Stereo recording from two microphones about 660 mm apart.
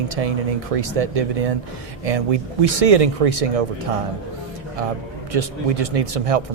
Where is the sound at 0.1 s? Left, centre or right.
Right.